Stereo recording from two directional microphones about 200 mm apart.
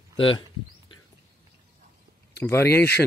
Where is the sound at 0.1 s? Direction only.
25° left (ahead or behind).